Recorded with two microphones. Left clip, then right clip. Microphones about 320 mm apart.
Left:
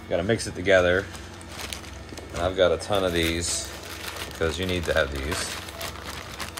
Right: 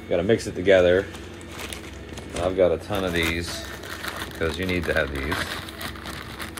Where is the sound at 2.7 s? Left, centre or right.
Left.